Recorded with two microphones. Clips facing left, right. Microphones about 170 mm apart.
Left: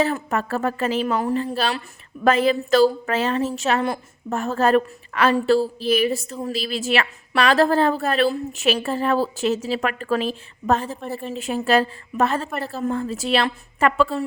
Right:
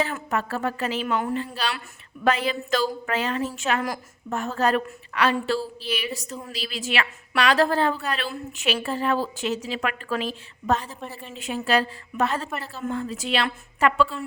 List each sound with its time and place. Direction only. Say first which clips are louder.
0.0 s a woman's voice: left 4 dB; 40° left (ahead or behind)
4.4 s a woman's voice: left 5 dB; 40° left (ahead or behind)